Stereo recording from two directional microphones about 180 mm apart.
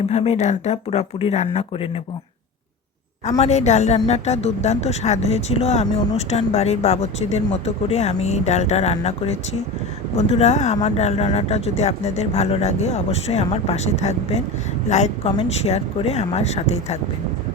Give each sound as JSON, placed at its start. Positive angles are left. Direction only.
{"t": 0.1, "sound": "a woman's voice", "side_deg": 40}
{"t": 3.2, "sound": "a woman's voice", "side_deg": 40}